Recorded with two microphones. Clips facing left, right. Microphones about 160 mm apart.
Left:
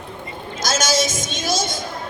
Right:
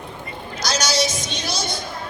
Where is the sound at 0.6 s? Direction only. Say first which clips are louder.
Left 2 dB; 50° left (ahead or behind).